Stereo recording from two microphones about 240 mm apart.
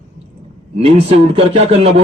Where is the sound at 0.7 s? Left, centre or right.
Right.